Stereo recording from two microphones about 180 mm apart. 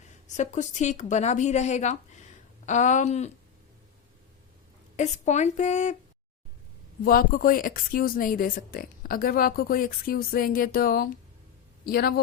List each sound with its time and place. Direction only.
0.3 s speech: 40° left (ahead or behind)
4.9 s speech: 40° left (ahead or behind)
7.0 s a man's voice: 55° left (ahead or behind)